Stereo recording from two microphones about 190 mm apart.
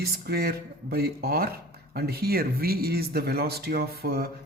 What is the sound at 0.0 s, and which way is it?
Speech, 55° right (ahead or behind).